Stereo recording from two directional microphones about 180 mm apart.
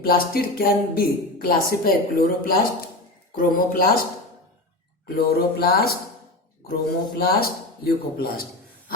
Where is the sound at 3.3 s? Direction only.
50° left (ahead or behind).